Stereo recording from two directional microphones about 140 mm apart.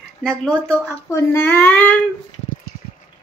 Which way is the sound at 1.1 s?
20° left (ahead or behind).